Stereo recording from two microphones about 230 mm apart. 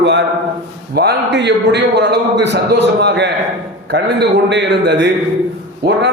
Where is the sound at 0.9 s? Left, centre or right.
Right.